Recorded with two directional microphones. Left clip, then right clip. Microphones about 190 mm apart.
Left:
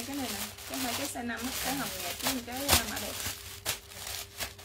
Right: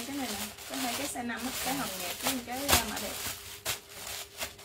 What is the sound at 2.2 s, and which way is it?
Speech, 35° left (ahead or behind).